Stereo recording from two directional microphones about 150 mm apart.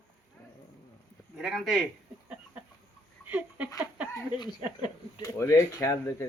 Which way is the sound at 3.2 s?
10° right (ahead or behind).